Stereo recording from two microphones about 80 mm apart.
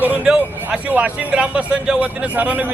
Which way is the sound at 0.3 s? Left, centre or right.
Centre.